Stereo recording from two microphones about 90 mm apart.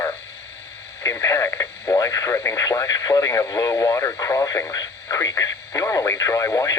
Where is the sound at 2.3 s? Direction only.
35° left (ahead or behind).